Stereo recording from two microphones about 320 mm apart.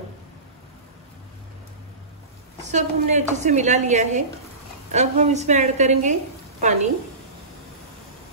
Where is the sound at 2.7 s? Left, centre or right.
Right.